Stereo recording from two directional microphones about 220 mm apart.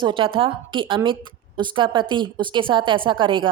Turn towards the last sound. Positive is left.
turn(degrees=-20)  # may be behind; listen again after turning